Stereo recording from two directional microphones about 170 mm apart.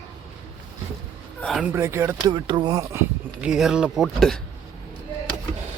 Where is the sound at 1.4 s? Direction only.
5° left (ahead or behind).